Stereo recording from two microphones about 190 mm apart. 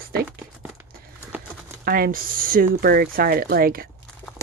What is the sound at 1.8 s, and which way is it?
A woman's voice, 50° right (ahead or behind).